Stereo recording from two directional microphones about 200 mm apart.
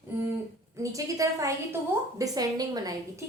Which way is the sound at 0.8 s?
15° right (ahead or behind).